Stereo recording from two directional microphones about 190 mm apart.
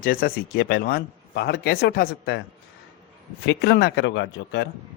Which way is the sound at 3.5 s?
60° left (ahead or behind).